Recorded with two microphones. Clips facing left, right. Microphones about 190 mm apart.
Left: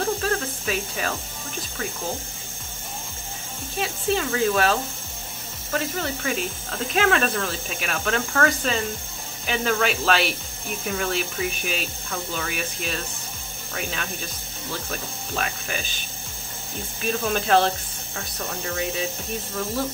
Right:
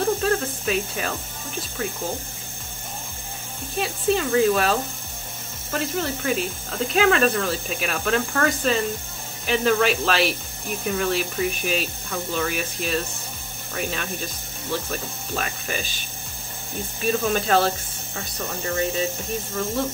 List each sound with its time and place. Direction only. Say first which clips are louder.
0.0 s a sound: right 3 dB; centre (ahead or behind)
3.7 s speech: right 2 dB; centre (ahead or behind)
17.0 s speech: right 2 dB; centre (ahead or behind)